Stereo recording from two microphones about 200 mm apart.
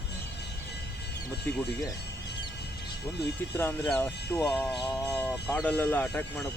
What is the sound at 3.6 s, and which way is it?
Speech, 10° left (ahead or behind).